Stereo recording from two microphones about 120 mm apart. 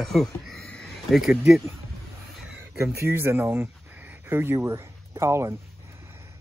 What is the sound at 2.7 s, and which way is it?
Speech, 20° right (ahead or behind).